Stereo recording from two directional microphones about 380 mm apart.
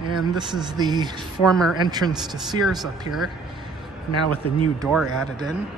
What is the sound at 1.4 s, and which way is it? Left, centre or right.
Speech, centre.